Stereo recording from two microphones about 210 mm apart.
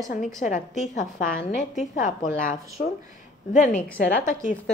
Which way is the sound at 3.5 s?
35° left (ahead or behind).